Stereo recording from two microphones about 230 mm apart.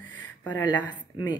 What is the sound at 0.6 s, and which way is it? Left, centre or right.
Speech, centre.